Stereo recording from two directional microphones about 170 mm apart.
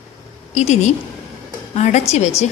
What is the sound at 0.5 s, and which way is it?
A woman's voice, 45° left (ahead or behind).